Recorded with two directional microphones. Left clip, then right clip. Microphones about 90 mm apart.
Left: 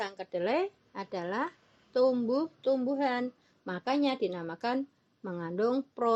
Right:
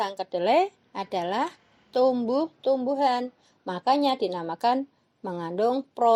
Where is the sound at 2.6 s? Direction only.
15° right (ahead or behind).